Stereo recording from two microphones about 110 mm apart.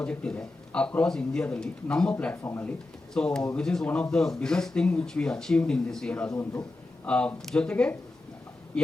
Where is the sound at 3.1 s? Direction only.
5° left (ahead or behind).